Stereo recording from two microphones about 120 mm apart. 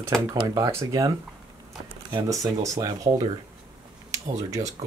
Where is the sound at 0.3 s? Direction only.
20° right (ahead or behind).